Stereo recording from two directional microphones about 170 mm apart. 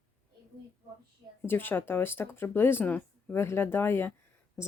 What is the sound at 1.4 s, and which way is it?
Speech, 10° left (ahead or behind).